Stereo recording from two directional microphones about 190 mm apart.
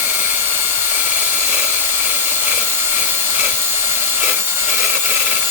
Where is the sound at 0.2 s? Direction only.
10° right (ahead or behind).